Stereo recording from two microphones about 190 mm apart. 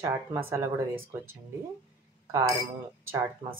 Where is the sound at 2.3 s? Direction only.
15° right (ahead or behind).